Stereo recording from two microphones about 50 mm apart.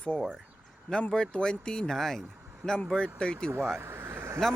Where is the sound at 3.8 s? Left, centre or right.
Right.